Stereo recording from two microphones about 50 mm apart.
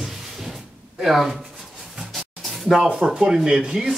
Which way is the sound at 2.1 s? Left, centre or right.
Centre.